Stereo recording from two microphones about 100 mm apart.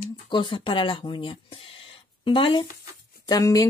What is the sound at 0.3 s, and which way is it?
Speech, 55° left (ahead or behind).